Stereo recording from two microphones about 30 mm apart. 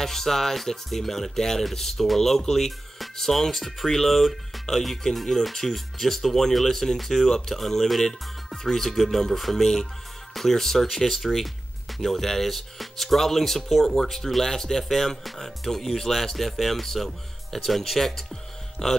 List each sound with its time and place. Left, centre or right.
0.0 s speech: centre
13.8 s speech: centre
18.3 s music: centre